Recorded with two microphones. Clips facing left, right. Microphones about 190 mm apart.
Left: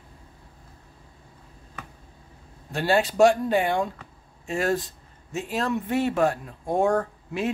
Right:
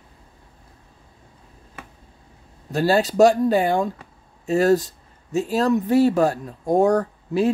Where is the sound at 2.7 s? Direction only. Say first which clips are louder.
Right 4 dB; 40° right (ahead or behind).